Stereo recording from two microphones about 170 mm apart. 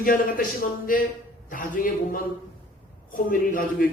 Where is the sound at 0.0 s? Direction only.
55° left (ahead or behind).